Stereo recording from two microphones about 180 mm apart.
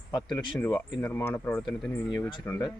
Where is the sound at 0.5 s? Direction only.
10° left (ahead or behind).